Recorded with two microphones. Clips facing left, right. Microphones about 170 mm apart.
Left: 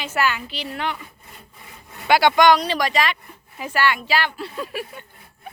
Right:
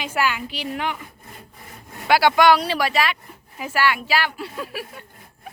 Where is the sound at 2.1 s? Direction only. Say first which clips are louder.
Even; 5° right (ahead or behind).